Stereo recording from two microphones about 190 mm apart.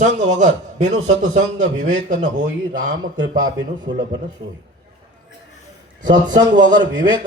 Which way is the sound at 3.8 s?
25° right (ahead or behind).